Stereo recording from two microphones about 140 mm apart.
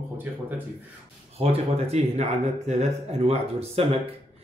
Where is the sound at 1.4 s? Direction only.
50° right (ahead or behind).